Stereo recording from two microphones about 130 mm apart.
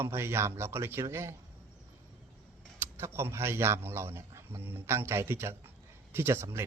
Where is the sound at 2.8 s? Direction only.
20° right (ahead or behind).